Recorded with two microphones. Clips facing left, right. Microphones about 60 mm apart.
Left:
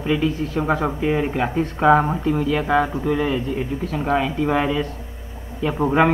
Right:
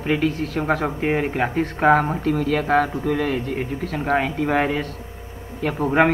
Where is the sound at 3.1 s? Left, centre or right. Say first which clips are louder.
Left 1 dB; right.